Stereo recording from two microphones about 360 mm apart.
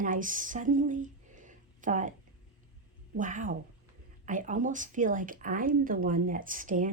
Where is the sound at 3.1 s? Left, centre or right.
Right.